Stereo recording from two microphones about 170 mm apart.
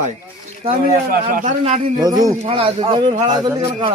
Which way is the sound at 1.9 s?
20° right (ahead or behind).